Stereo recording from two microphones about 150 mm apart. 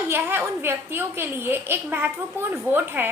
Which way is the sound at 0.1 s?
15° right (ahead or behind).